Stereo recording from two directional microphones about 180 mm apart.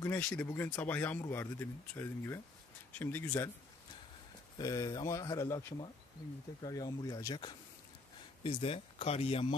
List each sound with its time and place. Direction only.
0.0 s speech: 10° left (ahead or behind)
4.6 s speech: 20° left (ahead or behind)